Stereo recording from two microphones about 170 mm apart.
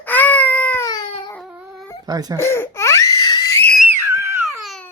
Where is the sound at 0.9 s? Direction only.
25° left (ahead or behind).